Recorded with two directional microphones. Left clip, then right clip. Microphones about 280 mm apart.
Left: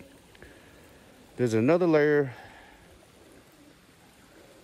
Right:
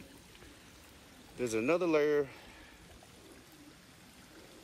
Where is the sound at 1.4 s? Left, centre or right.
Left.